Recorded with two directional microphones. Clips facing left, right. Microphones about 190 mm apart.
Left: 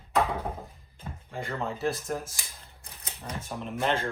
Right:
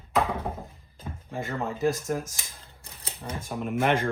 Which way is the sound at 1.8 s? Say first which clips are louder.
Right 7 dB; 15° right (ahead or behind).